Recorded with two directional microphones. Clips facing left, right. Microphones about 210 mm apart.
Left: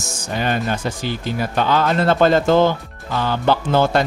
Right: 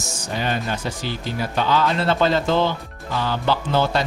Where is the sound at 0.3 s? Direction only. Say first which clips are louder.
Left 4 dB; 50° left (ahead or behind).